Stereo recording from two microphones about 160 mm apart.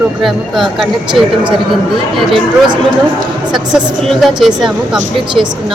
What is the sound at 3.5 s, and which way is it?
A woman's voice, centre (ahead or behind).